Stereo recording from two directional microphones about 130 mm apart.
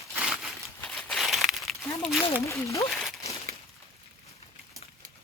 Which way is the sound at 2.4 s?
25° left (ahead or behind).